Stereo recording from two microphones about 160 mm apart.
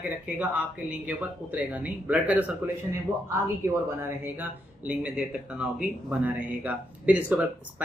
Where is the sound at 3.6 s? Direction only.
15° right (ahead or behind).